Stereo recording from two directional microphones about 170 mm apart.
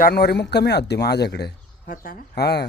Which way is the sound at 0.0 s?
70° left (ahead or behind).